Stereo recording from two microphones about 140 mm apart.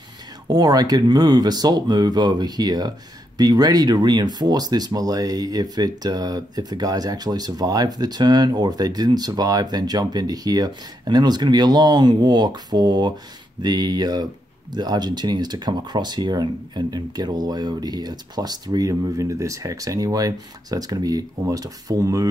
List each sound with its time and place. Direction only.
0.5 s speech: 25° right (ahead or behind)